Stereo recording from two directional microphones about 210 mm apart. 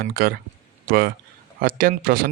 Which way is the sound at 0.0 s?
45° right (ahead or behind).